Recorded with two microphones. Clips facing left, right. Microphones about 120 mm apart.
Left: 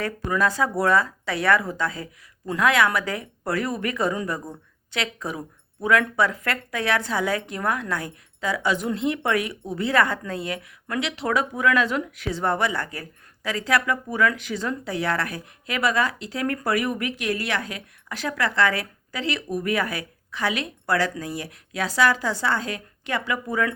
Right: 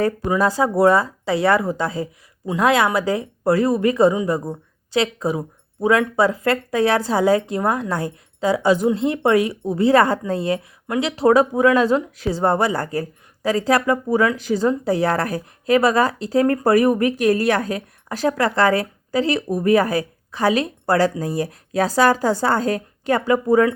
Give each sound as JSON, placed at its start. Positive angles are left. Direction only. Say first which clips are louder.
{"t": 0.3, "sound": "a woman's voice", "louder": "right 4 dB", "side_deg": -30}